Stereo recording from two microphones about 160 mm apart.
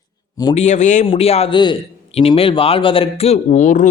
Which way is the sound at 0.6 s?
45° left (ahead or behind).